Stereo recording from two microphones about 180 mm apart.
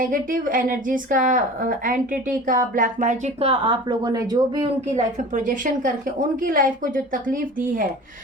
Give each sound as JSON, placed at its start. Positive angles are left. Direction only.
{"t": 0.0, "sound": "a woman's voice", "side_deg": -50}
{"t": 4.9, "sound": "a woman's voice", "side_deg": -45}